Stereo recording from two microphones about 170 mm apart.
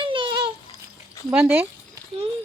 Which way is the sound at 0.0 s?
30° right (ahead or behind).